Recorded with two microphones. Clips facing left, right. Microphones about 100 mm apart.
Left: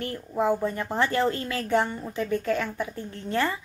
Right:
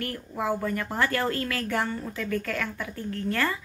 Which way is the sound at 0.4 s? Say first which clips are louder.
Left 3 dB; 25° left (ahead or behind).